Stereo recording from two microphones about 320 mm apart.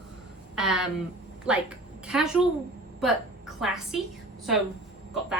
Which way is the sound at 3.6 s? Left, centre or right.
Centre.